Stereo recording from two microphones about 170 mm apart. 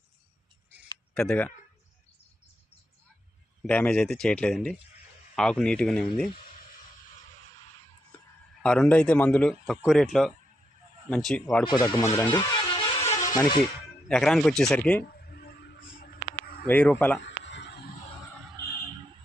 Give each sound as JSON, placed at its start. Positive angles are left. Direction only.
{"t": 1.1, "sound": "speech", "side_deg": 5}
{"t": 3.7, "sound": "a man's voice", "side_deg": 5}
{"t": 8.6, "sound": "a man's voice", "side_deg": 5}
{"t": 11.6, "sound": "speech", "side_deg": 25}
{"t": 14.1, "sound": "a man's voice", "side_deg": 0}
{"t": 15.1, "sound": "a sound", "side_deg": 65}
{"t": 16.6, "sound": "speech", "side_deg": 10}
{"t": 17.2, "sound": "a sound", "side_deg": 90}